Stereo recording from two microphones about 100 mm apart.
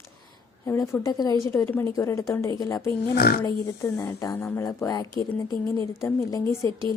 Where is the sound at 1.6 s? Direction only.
20° left (ahead or behind).